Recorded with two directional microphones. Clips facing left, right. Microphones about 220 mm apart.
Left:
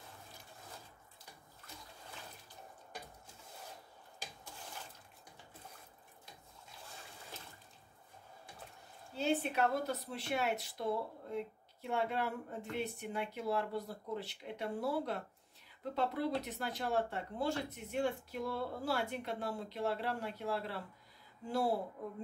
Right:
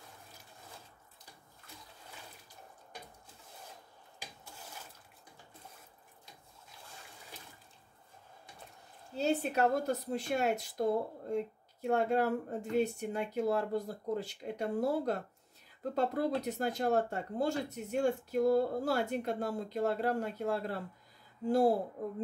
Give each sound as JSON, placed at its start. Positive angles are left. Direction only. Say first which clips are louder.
{"t": 9.1, "sound": "speech", "louder": "right 3 dB", "side_deg": -40}